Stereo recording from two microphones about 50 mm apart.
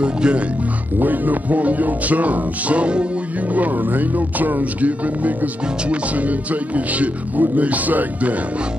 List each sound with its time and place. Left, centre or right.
0.0 s speech: centre
0.9 s speech: right
3.5 s speech: right